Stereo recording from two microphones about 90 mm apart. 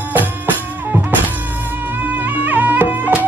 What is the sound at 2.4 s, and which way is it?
Music, 20° right (ahead or behind).